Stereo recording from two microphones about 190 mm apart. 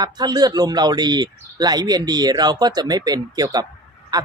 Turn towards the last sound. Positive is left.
turn(degrees=-20)  # may be behind; listen again after turning